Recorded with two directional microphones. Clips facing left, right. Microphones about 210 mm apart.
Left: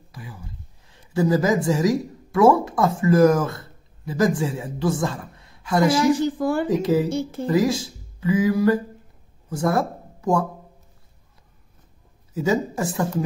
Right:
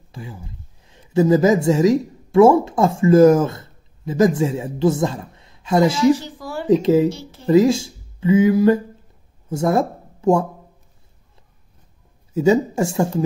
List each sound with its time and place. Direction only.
0.1 s a woman's voice: 25° right (ahead or behind)
6.1 s a sound: 55° left (ahead or behind)
6.7 s speech: 25° right (ahead or behind)
7.1 s speech: 50° left (ahead or behind)
7.4 s speech: 25° right (ahead or behind)
12.4 s speech: 25° right (ahead or behind)